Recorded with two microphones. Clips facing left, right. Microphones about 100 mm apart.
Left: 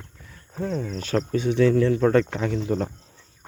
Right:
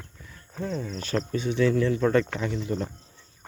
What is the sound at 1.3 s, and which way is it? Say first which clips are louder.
Speech: left 6 dB; 70° left (ahead or behind).